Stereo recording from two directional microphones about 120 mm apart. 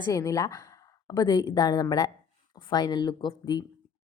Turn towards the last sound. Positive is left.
turn(degrees=35)  # may be behind; listen again after turning